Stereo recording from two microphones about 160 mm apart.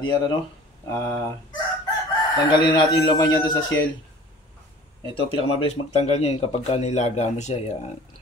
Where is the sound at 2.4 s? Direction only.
30° left (ahead or behind).